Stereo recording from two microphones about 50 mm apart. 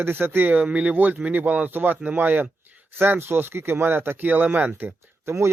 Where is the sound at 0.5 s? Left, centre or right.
Right.